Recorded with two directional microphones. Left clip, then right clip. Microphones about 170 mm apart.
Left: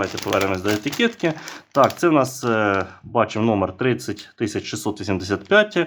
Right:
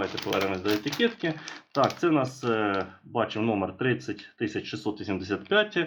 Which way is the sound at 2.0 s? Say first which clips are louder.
Left 8 dB; 40° left (ahead or behind).